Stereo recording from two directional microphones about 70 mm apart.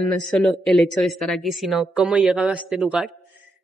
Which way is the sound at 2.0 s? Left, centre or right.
Centre.